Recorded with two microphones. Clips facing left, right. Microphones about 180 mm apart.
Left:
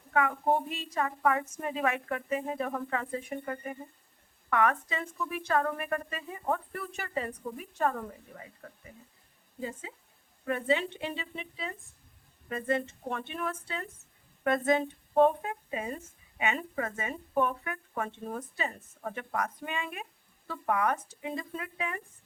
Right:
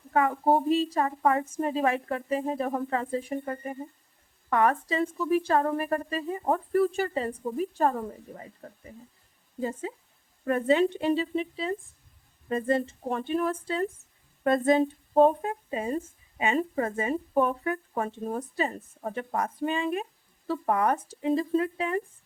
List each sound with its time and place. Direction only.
0.1 s a woman's voice: 35° right (ahead or behind)
9.6 s a woman's voice: 40° right (ahead or behind)